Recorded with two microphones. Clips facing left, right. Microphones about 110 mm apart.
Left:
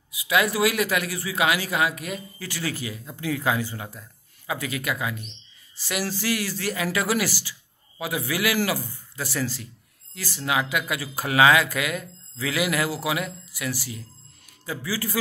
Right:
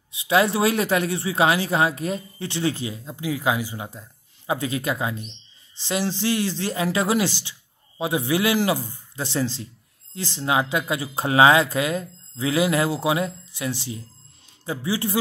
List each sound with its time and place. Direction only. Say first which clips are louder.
0.1 s speech: right 3 dB; 30° right (ahead or behind)